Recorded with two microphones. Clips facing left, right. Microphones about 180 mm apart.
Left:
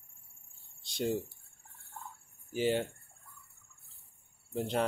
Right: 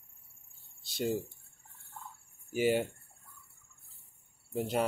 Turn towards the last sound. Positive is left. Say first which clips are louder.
# right 1 dB
turn(degrees=-10)  # may be behind; listen again after turning